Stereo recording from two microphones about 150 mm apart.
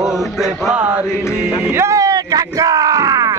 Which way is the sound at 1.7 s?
20° right (ahead or behind).